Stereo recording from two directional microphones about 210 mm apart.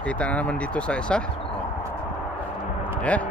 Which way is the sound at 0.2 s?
5° left (ahead or behind).